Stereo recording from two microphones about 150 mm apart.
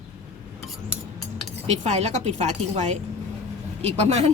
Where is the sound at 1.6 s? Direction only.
50° right (ahead or behind).